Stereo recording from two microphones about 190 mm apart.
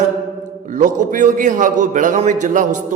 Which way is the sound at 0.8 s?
40° right (ahead or behind).